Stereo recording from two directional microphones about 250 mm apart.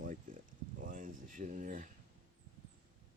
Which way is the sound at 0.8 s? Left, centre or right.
Right.